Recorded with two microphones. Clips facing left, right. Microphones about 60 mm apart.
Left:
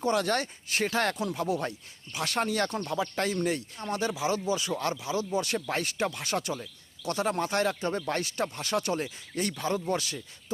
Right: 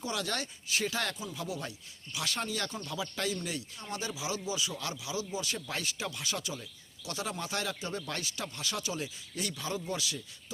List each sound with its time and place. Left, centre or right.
0.0 s speech: left
1.1 s speech: left
1.4 s speech: left